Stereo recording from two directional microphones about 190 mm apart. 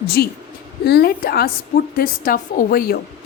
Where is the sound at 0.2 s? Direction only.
60° left (ahead or behind).